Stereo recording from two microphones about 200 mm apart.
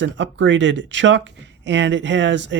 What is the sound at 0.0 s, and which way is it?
Speech, 65° right (ahead or behind).